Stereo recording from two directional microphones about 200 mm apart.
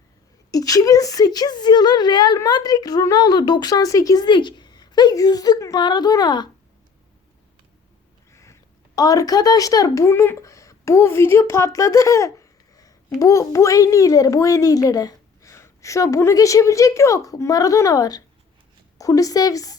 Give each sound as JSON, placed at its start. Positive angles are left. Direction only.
{"t": 0.5, "sound": "a woman's voice", "side_deg": 20}
{"t": 8.3, "sound": "a sound", "side_deg": 15}
{"t": 9.0, "sound": "a child's voice", "side_deg": 20}